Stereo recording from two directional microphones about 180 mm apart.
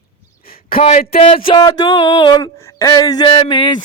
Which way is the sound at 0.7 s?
40° left (ahead or behind).